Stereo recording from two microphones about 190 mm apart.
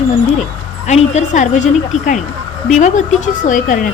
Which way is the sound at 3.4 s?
45° left (ahead or behind).